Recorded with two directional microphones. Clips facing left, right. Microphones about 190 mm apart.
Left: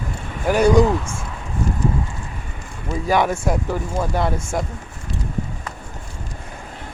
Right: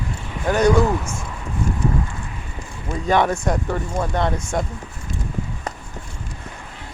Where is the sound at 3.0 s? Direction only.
5° left (ahead or behind).